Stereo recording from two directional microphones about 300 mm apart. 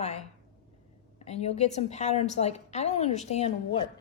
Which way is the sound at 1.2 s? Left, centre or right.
Left.